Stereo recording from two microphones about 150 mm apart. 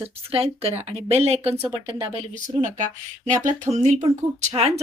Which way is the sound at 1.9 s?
30° right (ahead or behind).